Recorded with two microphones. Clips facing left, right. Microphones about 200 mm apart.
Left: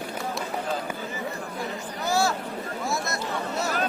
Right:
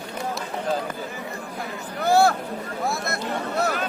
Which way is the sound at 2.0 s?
55° right (ahead or behind).